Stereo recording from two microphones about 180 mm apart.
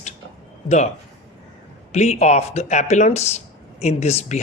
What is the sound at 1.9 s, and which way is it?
Speech, 40° left (ahead or behind).